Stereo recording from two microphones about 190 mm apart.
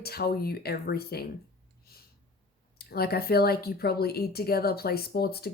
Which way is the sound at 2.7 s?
55° left (ahead or behind).